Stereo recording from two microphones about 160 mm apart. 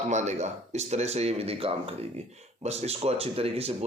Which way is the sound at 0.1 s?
45° right (ahead or behind).